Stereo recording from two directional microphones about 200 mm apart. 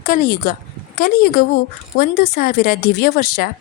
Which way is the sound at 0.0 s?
45° left (ahead or behind).